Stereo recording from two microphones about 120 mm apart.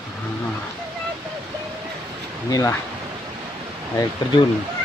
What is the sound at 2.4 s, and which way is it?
Speech, 30° left (ahead or behind).